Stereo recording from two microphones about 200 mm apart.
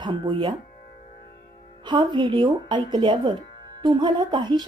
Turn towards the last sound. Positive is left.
turn(degrees=-20)  # may be behind; listen again after turning